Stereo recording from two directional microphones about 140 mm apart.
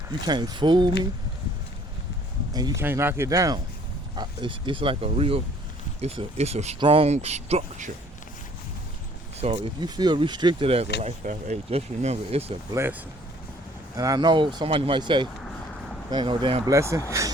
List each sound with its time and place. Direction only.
0.3 s speech: 30° right (ahead or behind)
2.5 s speech: 30° right (ahead or behind)
2.8 s speech: 15° right (ahead or behind)
4.1 s speech: 35° right (ahead or behind); by 6.7 s 50° right (ahead or behind)
6.7 s speech: 40° right (ahead or behind)
9.4 s speech: 50° right (ahead or behind)
9.8 s speech: 30° right (ahead or behind)
10.7 s speech: 45° right (ahead or behind)
11.3 s speech: 55° right (ahead or behind)
12.7 s speech: 15° right (ahead or behind); by 16.6 s 40° right (ahead or behind)
16.6 s speech: 20° right (ahead or behind)